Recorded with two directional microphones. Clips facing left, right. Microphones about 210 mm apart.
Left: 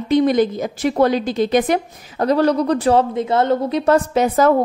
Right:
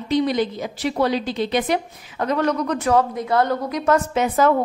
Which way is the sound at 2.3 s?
35° left (ahead or behind).